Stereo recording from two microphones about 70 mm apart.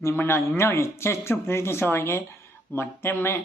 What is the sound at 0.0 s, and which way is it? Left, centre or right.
Speech, left.